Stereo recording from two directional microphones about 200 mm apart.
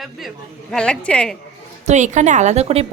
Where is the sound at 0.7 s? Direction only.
5° left (ahead or behind).